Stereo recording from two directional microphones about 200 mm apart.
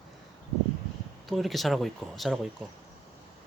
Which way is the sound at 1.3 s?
Centre (ahead or behind).